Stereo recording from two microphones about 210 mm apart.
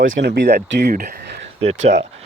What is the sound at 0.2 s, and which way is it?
Speech, 50° right (ahead or behind).